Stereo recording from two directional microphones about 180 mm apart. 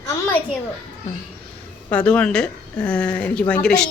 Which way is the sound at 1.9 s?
5° left (ahead or behind).